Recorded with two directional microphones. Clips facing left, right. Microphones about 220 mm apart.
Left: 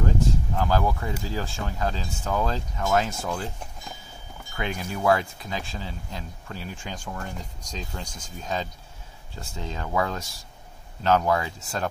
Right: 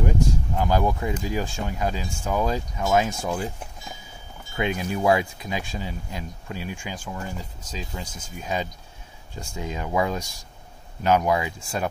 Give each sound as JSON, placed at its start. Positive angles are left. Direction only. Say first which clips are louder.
{"t": 0.6, "sound": "speech", "louder": "right 3 dB", "side_deg": -15}
{"t": 4.6, "sound": "speech", "louder": "right 5 dB", "side_deg": -15}